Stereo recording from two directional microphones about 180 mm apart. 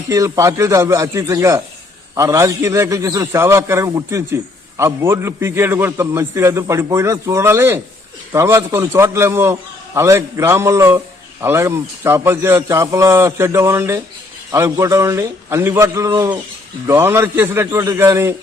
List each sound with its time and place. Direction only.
0.1 s a man's voice: 15° right (ahead or behind)